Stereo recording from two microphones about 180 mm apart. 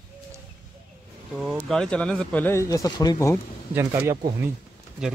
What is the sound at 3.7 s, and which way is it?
Speech, 15° right (ahead or behind).